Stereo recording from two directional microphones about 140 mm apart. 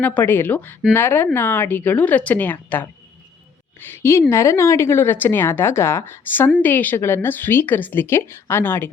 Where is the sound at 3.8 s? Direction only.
15° left (ahead or behind).